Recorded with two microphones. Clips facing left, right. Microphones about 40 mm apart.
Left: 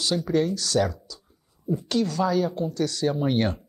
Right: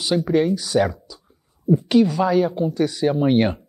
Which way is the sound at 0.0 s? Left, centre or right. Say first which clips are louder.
Right 5 dB; centre.